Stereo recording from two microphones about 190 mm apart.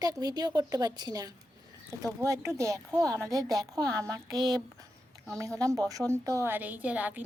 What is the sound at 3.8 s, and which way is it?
Speech, 5° left (ahead or behind).